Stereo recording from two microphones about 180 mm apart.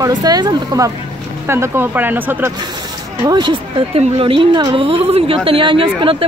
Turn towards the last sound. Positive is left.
turn(degrees=-30)  # may be behind; listen again after turning